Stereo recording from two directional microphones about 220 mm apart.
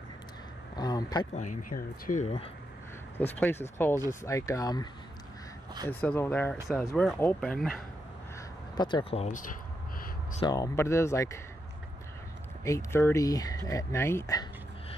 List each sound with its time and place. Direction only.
0.7 s a sound: 20° left (ahead or behind)
1.3 s speech: 35° left (ahead or behind)
3.2 s speech: 10° left (ahead or behind)
5.9 s speech: 10° left (ahead or behind)
8.7 s speech: 20° left (ahead or behind)
10.4 s speech: 15° left (ahead or behind)
12.6 s speech: 10° left (ahead or behind)